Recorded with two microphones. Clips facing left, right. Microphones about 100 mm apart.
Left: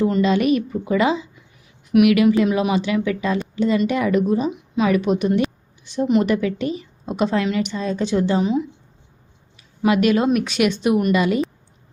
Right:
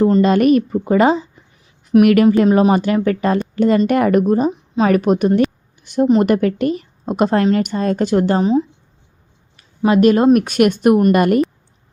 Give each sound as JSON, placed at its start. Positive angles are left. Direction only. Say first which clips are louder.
{"t": 0.0, "sound": "a woman's voice", "louder": "right 5 dB", "side_deg": -45}
{"t": 9.8, "sound": "a woman's voice", "louder": "right 5 dB", "side_deg": -40}